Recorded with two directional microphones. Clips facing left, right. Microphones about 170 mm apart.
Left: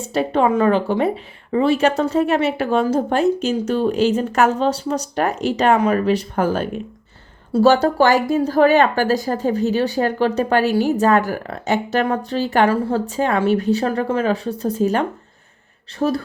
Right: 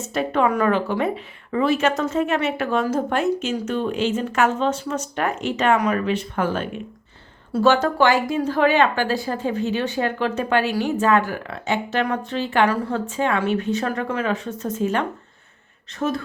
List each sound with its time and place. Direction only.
0.0 s speech: 30° left (ahead or behind)
12.6 s speech: 30° left (ahead or behind)